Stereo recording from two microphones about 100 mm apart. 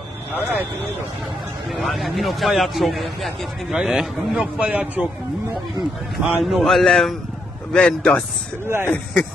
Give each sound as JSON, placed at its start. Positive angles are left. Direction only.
{"t": 1.8, "sound": "speech", "side_deg": 0}
{"t": 4.6, "sound": "a man's voice", "side_deg": -15}
{"t": 6.1, "sound": "a man's voice", "side_deg": -5}
{"t": 8.6, "sound": "speech", "side_deg": -25}